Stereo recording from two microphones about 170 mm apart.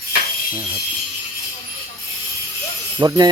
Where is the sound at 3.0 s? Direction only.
25° right (ahead or behind).